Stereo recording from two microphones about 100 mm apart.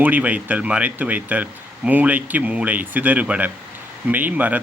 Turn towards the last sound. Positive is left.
turn(degrees=-15)  # may be behind; listen again after turning